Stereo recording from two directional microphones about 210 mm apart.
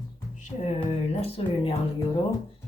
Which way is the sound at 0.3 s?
35° left (ahead or behind).